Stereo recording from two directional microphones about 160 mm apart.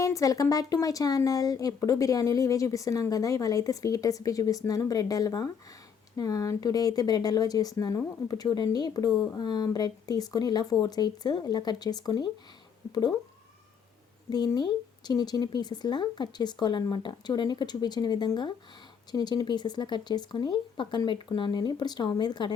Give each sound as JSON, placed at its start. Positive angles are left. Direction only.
{"t": 0.0, "sound": "speech", "side_deg": 20}
{"t": 14.3, "sound": "speech", "side_deg": 25}